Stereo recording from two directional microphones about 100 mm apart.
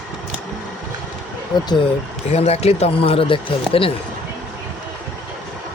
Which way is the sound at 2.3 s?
90° left.